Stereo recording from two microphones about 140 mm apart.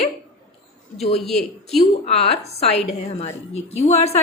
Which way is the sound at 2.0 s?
50° left (ahead or behind).